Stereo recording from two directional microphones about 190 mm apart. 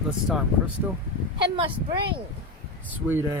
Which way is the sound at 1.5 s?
25° right (ahead or behind).